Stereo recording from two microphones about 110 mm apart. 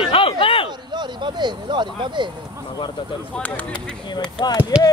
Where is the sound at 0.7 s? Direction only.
40° right (ahead or behind).